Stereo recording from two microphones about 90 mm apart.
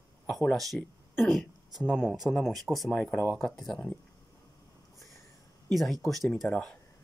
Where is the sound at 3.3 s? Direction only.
Centre (ahead or behind).